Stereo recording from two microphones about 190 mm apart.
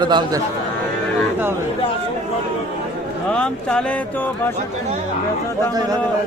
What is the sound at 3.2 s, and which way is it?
Speech, 5° left (ahead or behind).